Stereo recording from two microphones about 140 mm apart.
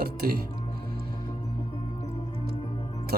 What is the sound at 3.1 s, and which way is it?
Music, 90° right.